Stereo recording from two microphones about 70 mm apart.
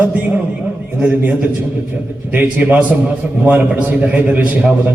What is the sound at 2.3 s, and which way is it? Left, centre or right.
A man's voice, right.